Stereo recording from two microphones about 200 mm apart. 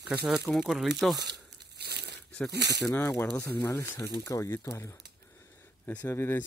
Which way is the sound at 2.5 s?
55° right (ahead or behind).